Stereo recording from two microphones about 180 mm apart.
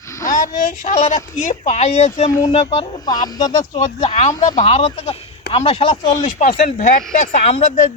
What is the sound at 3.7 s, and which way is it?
Speech, 40° left (ahead or behind).